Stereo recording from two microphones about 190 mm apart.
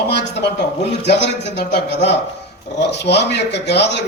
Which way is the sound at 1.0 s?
65° left (ahead or behind).